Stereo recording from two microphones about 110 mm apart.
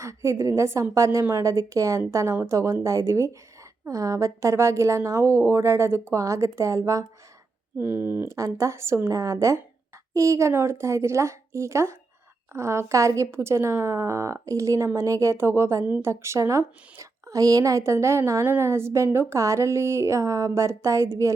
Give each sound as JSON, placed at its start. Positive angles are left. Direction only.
{"t": 0.0, "sound": "a woman's voice", "side_deg": -25}